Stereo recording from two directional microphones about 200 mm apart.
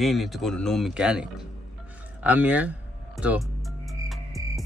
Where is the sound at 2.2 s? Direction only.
5° right (ahead or behind).